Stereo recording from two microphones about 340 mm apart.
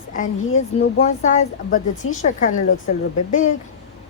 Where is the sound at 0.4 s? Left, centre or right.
Left.